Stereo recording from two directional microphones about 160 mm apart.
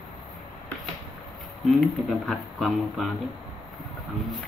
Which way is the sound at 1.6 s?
Centre (ahead or behind).